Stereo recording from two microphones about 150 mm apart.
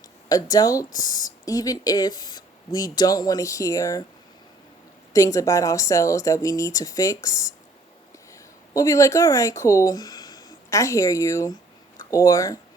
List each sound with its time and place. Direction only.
0.3 s speech: 25° left (ahead or behind)
5.1 s speech: 20° left (ahead or behind)